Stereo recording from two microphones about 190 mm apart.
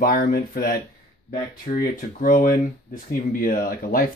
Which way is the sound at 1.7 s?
45° left (ahead or behind).